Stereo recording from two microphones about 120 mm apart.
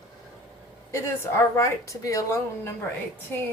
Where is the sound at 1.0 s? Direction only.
20° left (ahead or behind).